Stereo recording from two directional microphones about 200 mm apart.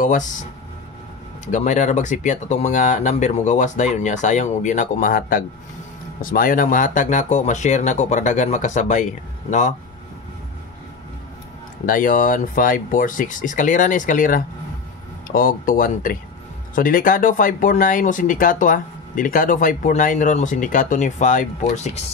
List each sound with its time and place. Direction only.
0.0 s speech: 40° left (ahead or behind)
11.8 s speech: 45° left (ahead or behind)